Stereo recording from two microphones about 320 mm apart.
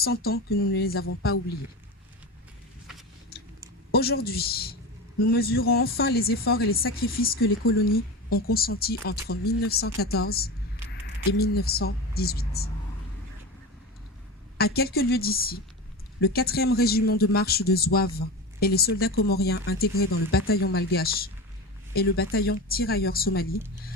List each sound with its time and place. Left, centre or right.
0.0 s speech: left
3.9 s speech: left
14.6 s speech: left